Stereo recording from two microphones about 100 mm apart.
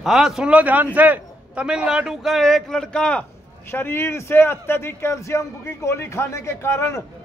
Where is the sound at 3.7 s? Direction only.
25° left (ahead or behind).